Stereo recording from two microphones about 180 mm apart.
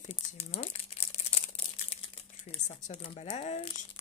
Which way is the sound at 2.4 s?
35° left (ahead or behind).